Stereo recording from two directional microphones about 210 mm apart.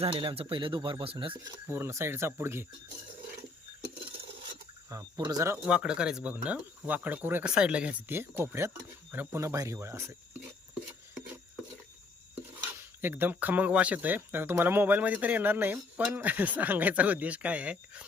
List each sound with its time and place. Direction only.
0.0 s speech: 25° right (ahead or behind)
1.7 s speech: 10° right (ahead or behind)
4.9 s speech: 15° right (ahead or behind)
5.6 s speech: 5° right (ahead or behind)
10.8 s filing: 5° right (ahead or behind)
13.0 s speech: 10° right (ahead or behind)